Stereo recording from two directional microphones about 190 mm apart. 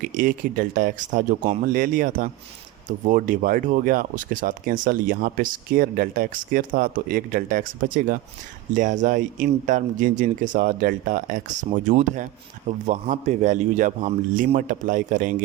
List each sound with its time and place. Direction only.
0.0 s a man's voice: 45° right (ahead or behind)